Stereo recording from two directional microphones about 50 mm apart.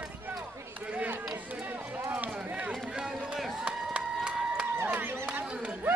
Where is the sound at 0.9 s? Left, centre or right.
Right.